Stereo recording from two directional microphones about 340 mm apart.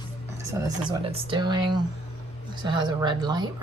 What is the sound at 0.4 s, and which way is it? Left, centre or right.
Speech, centre.